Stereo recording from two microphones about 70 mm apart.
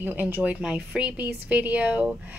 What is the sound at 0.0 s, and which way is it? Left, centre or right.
Speech, right.